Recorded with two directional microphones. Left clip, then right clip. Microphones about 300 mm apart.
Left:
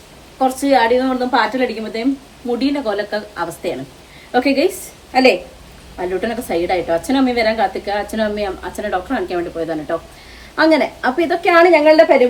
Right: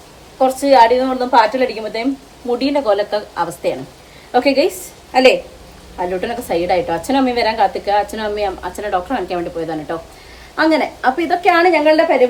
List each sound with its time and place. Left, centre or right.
0.3 s a woman's voice: centre